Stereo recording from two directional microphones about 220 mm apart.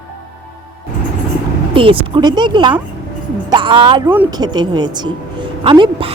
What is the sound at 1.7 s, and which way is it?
A woman's voice, 25° right (ahead or behind).